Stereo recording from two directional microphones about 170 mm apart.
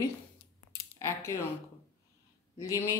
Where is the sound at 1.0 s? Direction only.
15° left (ahead or behind).